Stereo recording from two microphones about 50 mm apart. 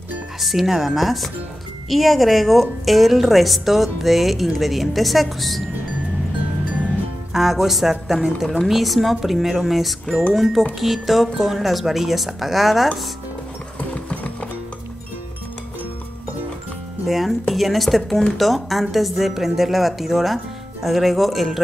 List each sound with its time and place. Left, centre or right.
0.4 s a woman's voice: centre
7.3 s a woman's voice: centre
13.7 s clip-clop: left
17.0 s a woman's voice: centre